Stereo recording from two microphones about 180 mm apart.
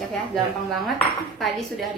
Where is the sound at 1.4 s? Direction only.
Centre (ahead or behind).